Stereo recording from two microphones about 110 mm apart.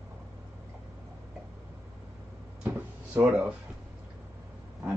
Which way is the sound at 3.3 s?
15° right (ahead or behind).